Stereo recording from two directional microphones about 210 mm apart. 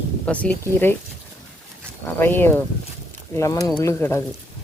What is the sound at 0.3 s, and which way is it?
Speech, 5° left (ahead or behind).